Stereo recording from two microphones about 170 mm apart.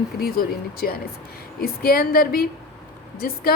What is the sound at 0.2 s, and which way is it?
A woman's voice, 60° left (ahead or behind).